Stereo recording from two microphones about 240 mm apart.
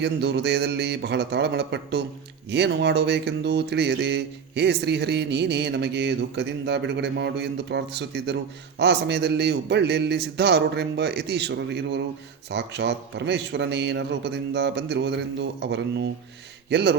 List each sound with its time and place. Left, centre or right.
0.0 s speech: right